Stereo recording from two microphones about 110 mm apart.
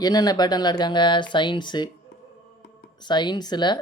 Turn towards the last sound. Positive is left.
turn(degrees=40)  # may be behind; listen again after turning